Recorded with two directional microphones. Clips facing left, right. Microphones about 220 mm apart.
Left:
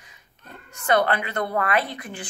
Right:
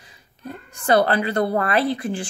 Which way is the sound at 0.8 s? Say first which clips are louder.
Right 4 dB; 35° right (ahead or behind).